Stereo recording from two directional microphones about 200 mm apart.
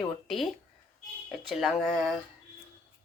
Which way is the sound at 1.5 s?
Centre (ahead or behind).